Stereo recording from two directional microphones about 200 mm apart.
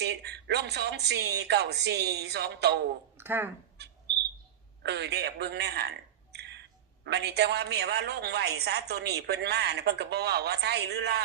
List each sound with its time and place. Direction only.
0.0 s a man's voice: 55° right (ahead or behind)
3.2 s speech: 10° right (ahead or behind)
4.8 s a man's voice: 55° right (ahead or behind)